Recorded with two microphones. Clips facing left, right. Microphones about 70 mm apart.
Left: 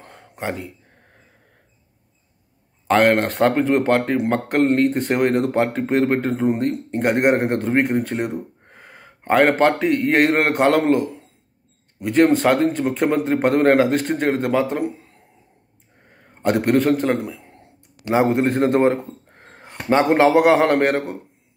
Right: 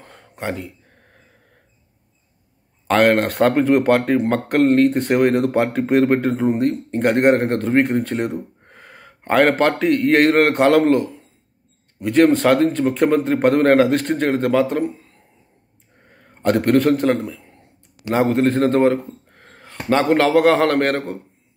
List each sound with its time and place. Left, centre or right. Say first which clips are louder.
0.0 s a sound: even; centre
2.9 s a man's voice: right 1 dB; centre
16.2 s a man's voice: right 2 dB; centre
18.0 s speech: right 1 dB; centre